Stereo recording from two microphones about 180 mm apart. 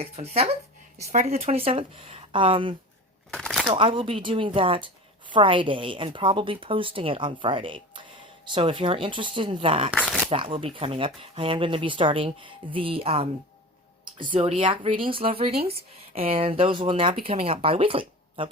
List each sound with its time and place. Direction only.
0.0 s speech: 35° right (ahead or behind)
3.3 s speech: centre (ahead or behind)
3.7 s a woman's voice: 30° right (ahead or behind)